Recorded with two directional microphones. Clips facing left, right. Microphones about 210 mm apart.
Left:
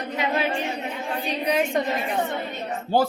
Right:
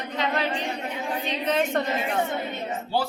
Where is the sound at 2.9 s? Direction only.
50° left (ahead or behind).